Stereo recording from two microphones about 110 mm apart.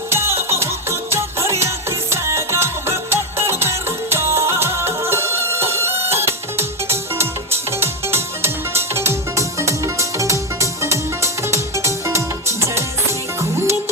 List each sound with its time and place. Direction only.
0.1 s music: 25° right (ahead or behind)